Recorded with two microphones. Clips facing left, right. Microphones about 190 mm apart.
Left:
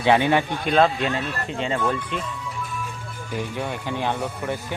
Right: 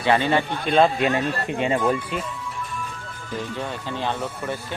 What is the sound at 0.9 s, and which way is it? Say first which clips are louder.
Speech: right 4 dB; 50° right (ahead or behind).